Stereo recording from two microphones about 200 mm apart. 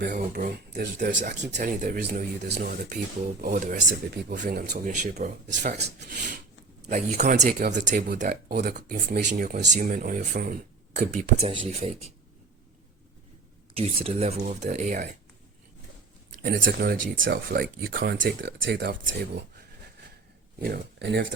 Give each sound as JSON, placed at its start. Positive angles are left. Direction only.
{"t": 0.0, "sound": "speech", "side_deg": -50}
{"t": 1.5, "sound": "speech", "side_deg": -45}
{"t": 2.6, "sound": "speech", "side_deg": -45}
{"t": 4.3, "sound": "speech", "side_deg": -50}
{"t": 5.8, "sound": "speech", "side_deg": -60}
{"t": 6.8, "sound": "speech", "side_deg": -35}
{"t": 13.7, "sound": "speech", "side_deg": -30}
{"t": 16.4, "sound": "speech", "side_deg": -45}